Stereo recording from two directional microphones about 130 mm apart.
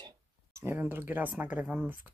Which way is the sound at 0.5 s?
20° right (ahead or behind).